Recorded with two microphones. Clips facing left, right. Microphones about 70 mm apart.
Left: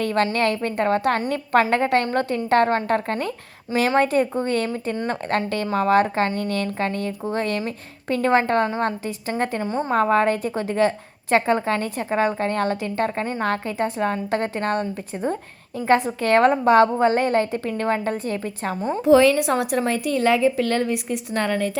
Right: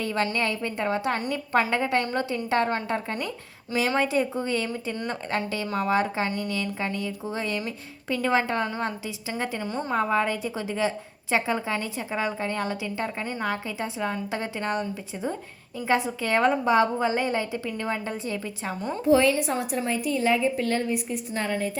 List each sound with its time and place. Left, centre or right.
0.0 s a woman's voice: left
3.2 s a woman's voice: left
19.0 s a woman's voice: left